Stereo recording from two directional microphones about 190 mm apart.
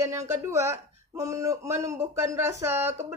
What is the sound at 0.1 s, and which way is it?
A woman's voice, 15° right (ahead or behind).